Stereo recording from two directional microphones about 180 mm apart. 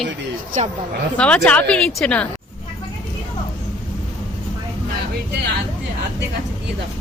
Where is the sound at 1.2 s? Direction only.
5° left (ahead or behind).